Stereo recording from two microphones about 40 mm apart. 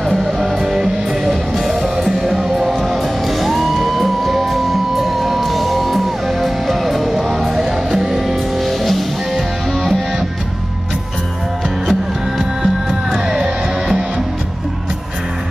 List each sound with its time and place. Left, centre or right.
0.0 s music: centre
0.6 s music: centre
8.6 s music: centre
12.6 s music: centre